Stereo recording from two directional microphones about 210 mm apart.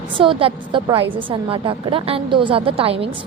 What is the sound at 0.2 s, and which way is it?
A woman's voice, 25° right (ahead or behind).